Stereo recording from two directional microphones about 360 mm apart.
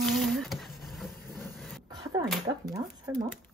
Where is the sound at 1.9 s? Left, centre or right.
Centre.